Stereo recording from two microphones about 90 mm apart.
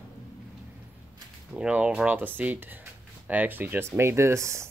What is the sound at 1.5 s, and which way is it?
Speech, 15° right (ahead or behind).